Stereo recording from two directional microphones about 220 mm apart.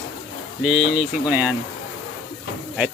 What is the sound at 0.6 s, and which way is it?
Speech, centre (ahead or behind).